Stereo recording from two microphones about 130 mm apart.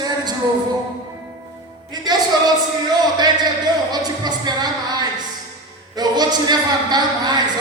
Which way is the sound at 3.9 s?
30° right (ahead or behind).